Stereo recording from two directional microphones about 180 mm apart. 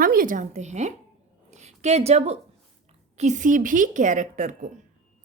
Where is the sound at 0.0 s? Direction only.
50° right (ahead or behind).